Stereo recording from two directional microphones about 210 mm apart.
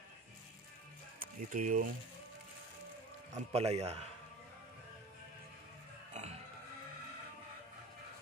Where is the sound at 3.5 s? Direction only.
30° right (ahead or behind).